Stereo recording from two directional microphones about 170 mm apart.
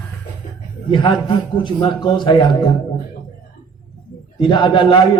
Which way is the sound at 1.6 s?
30° left (ahead or behind).